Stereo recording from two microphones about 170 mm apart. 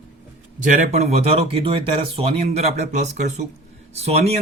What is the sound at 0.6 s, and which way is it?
Speech, 50° right (ahead or behind).